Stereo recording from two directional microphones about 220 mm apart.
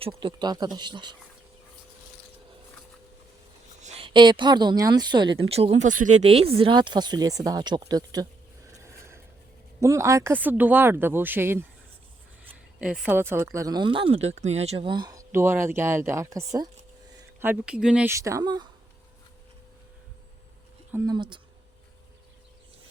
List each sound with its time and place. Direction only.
0.0 s speech: 25° right (ahead or behind)
3.8 s speech: 30° right (ahead or behind)
8.7 s mechanisms: 10° right (ahead or behind)
9.8 s speech: 15° right (ahead or behind)
12.8 s speech: 5° right (ahead or behind)
20.9 s speech: 20° right (ahead or behind)